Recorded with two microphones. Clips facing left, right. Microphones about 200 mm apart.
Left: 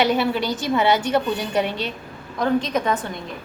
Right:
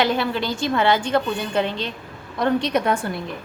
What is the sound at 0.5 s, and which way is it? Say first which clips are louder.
Speech: right 2 dB; 10° left (ahead or behind).